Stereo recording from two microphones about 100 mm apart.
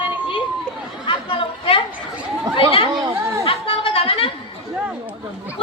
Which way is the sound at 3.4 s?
65° left (ahead or behind).